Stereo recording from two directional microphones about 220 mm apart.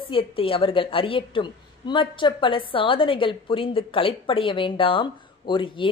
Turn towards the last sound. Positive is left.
turn(degrees=25)  # may be behind; listen again after turning